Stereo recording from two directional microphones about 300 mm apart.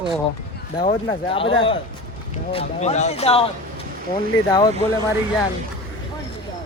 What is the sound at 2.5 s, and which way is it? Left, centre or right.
Speech, left.